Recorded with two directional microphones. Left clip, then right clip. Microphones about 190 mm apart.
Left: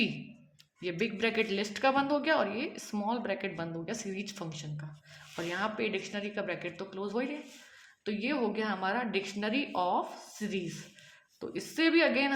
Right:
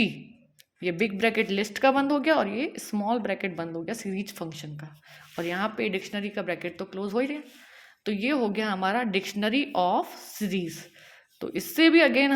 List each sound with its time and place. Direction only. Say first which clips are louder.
0.8 s a woman's voice: right 6 dB; 45° right (ahead or behind)